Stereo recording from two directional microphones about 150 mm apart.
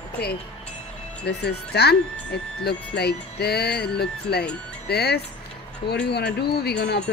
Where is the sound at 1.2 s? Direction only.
90° left.